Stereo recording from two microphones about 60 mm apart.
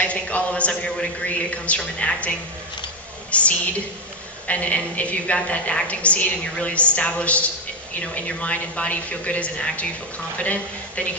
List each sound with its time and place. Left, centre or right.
0.0 s a man's voice: left